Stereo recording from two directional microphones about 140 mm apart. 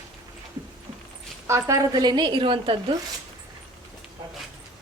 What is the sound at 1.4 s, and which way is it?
A woman's voice, 20° right (ahead or behind).